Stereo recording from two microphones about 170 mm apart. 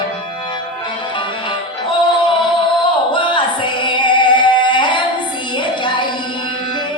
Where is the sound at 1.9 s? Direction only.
30° left (ahead or behind).